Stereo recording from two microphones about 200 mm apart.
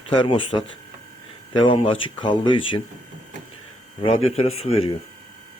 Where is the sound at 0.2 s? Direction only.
25° left (ahead or behind).